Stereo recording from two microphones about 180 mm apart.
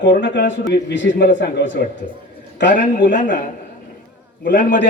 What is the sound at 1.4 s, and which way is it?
Speech, 90° left.